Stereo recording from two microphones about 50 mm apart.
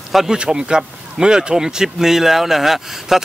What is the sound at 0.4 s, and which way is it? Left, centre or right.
Speech, centre.